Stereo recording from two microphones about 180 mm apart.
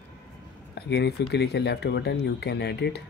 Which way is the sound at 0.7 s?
65° left (ahead or behind).